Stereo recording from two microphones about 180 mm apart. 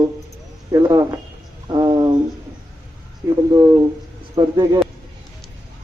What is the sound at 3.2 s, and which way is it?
Speech, 15° right (ahead or behind).